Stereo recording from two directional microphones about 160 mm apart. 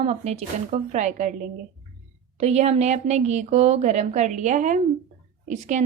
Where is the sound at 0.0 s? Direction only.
40° right (ahead or behind).